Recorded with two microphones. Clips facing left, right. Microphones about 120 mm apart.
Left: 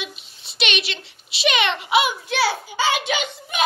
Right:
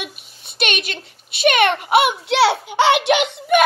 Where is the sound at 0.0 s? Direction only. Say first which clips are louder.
Right 2 dB; 55° right (ahead or behind).